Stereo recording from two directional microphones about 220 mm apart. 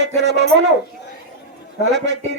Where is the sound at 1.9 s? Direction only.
50° right (ahead or behind).